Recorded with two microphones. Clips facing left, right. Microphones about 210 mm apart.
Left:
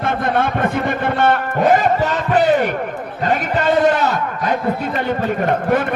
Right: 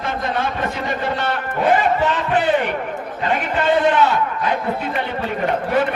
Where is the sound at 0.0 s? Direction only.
55° left (ahead or behind).